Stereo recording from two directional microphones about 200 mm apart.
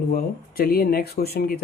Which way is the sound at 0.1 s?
45° left (ahead or behind).